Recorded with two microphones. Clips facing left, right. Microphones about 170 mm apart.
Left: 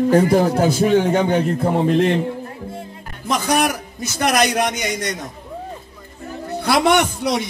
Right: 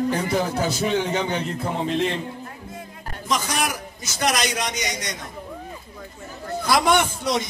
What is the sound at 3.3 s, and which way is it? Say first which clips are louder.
A man's voice: left 6 dB; 55° left (ahead or behind).